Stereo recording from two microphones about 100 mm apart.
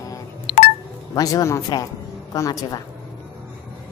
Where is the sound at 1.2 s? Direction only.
40° left (ahead or behind).